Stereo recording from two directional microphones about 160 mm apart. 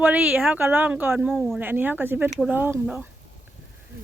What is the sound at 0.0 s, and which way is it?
Speech, 10° right (ahead or behind).